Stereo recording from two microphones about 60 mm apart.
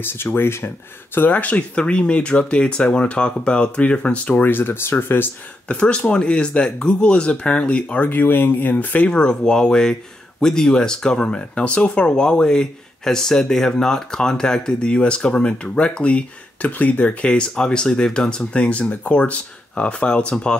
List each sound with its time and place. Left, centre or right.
0.0 s speech: left
1.3 s speech: left
5.7 s speech: centre
8.1 s speech: left; by 20.5 s centre